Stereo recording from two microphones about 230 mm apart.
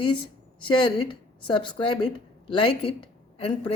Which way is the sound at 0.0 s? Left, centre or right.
Left.